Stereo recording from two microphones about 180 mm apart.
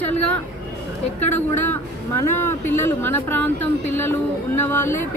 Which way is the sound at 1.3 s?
10° left (ahead or behind).